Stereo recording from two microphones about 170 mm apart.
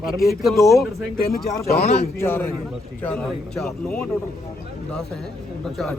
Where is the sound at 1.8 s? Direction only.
40° left (ahead or behind).